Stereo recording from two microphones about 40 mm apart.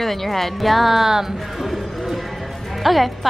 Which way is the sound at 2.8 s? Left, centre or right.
Centre.